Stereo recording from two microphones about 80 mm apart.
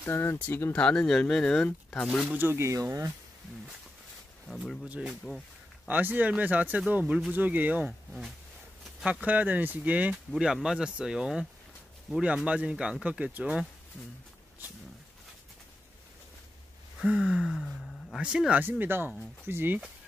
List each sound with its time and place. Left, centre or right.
0.1 s speech: left
0.7 s speech: centre
2.2 s speech: right
4.5 s speech: centre
4.8 s speech: centre
9.0 s speech: centre
10.3 s speech: centre
17.0 s speech: centre
17.6 s speech: centre
18.1 s speech: centre
18.6 s speech: right